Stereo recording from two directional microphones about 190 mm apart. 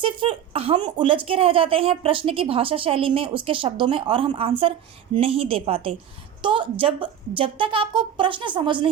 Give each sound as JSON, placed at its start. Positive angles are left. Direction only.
{"t": 0.0, "sound": "speech", "side_deg": -30}